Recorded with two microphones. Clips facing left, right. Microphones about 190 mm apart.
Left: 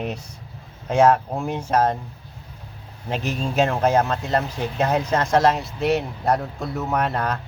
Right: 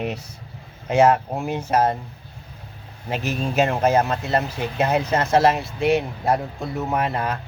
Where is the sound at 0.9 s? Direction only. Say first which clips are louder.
Even; 10° right (ahead or behind).